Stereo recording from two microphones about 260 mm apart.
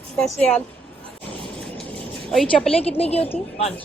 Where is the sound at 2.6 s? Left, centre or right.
Left.